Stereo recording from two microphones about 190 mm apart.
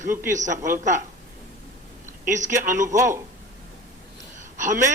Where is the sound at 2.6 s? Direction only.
40° right (ahead or behind).